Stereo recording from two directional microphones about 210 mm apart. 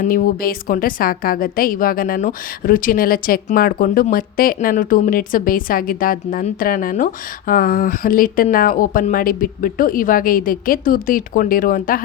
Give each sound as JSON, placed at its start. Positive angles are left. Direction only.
{"t": 0.0, "sound": "a woman's voice", "side_deg": 40}